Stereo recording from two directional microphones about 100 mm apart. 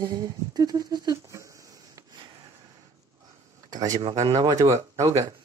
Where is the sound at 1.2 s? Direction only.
30° right (ahead or behind).